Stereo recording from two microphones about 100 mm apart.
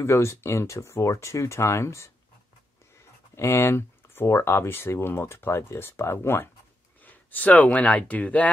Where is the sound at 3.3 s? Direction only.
25° left (ahead or behind).